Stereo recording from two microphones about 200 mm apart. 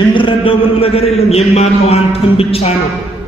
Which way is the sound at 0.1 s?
25° left (ahead or behind).